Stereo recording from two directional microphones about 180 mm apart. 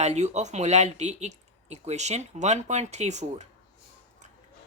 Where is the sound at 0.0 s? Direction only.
40° right (ahead or behind).